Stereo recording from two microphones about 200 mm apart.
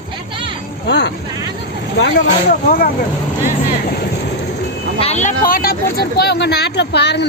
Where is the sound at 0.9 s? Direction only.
60° left (ahead or behind).